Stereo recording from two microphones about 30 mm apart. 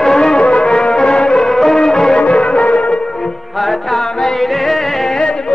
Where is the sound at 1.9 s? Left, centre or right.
Left.